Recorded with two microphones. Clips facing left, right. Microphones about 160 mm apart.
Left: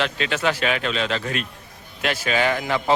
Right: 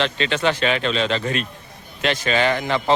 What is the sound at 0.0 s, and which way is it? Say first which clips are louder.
A man's voice: right 2 dB; 5° left (ahead or behind).